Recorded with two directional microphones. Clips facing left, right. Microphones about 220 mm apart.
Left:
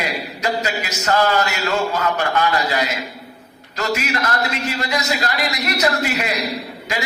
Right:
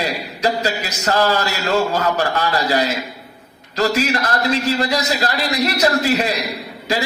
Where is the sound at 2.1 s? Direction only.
35° right (ahead or behind).